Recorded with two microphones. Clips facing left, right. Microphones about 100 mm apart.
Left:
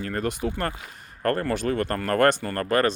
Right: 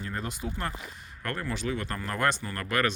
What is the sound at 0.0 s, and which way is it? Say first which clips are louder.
Speech: left 8 dB; 65° left (ahead or behind).